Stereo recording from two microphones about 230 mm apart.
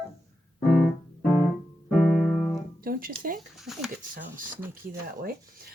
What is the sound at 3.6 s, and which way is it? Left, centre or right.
Speech, centre.